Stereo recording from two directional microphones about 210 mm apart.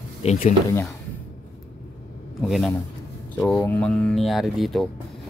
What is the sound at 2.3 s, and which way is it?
Speech, centre (ahead or behind).